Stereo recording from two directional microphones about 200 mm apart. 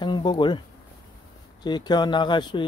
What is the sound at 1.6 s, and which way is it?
Speech, 20° left (ahead or behind).